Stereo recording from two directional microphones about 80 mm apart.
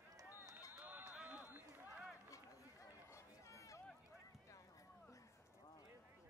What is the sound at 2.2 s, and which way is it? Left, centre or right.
Run, left.